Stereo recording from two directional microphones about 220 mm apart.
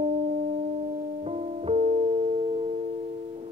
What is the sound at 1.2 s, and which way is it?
Music, 30° right (ahead or behind).